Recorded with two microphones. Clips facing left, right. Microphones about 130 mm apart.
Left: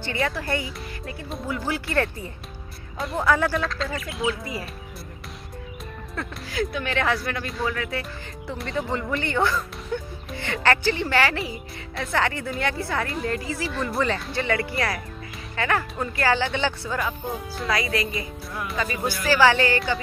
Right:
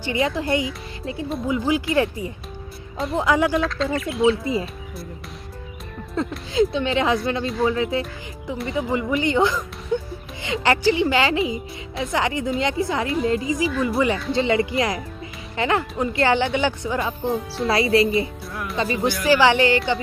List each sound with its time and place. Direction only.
0.0 s a woman's voice: 15° right (ahead or behind)
3.6 s speech: centre (ahead or behind)
6.2 s speech: 20° right (ahead or behind)
8.5 s a woman's voice: 5° right (ahead or behind)
14.3 s speech: 20° right (ahead or behind)
17.6 s speech: 30° right (ahead or behind)
18.5 s speech: centre (ahead or behind)
19.0 s speech: 20° right (ahead or behind)